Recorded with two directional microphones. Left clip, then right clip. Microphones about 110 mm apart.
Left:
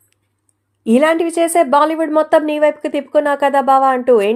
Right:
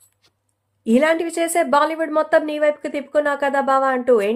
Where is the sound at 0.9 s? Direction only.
35° left (ahead or behind).